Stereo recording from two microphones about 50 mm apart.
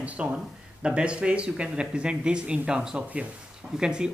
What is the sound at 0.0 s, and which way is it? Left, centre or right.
Speech, right.